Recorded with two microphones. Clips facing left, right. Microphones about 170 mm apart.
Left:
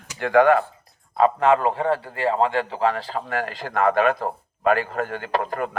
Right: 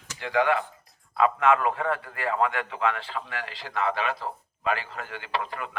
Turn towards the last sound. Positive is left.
turn(degrees=45)  # may be behind; listen again after turning